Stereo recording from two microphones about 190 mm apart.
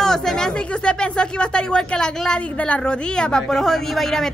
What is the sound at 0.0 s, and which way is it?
Speech, 5° left (ahead or behind).